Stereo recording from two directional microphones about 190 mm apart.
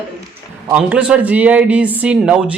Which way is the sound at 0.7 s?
5° right (ahead or behind).